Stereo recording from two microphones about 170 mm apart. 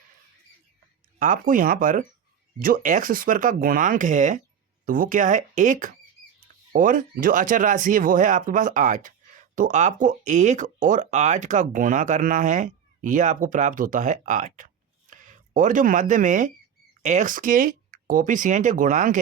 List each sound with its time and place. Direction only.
1.2 s speech: 50° right (ahead or behind)